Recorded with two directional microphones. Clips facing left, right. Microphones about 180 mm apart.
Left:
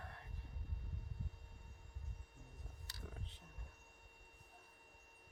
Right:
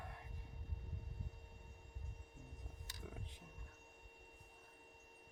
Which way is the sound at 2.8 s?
15° right (ahead or behind).